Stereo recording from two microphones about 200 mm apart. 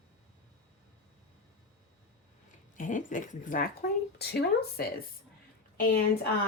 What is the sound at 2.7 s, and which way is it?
Speech, 40° left (ahead or behind).